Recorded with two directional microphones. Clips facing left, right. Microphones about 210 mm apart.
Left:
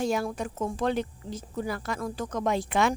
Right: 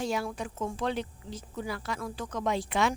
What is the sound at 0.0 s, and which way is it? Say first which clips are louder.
A woman's voice: left 4 dB; 45° left (ahead or behind).